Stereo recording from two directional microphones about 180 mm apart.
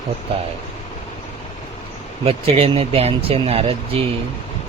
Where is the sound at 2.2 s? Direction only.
35° right (ahead or behind).